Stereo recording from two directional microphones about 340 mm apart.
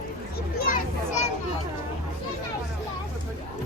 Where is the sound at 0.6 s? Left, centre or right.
Left.